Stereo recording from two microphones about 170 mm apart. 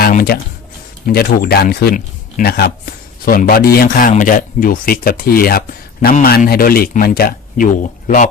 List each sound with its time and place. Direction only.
0.0 s a man's voice: 60° left (ahead or behind)